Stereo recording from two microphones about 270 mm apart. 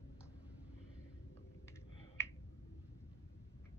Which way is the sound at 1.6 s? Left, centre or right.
Centre.